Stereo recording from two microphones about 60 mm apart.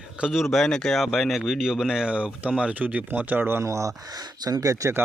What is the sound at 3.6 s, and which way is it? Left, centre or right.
Speech, right.